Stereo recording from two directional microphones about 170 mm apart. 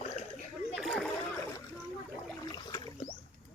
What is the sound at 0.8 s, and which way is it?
Splash, centre (ahead or behind).